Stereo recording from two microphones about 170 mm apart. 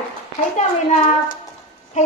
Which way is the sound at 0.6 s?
45° left (ahead or behind).